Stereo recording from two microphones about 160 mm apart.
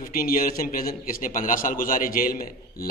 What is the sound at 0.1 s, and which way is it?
A man's voice, 65° left (ahead or behind).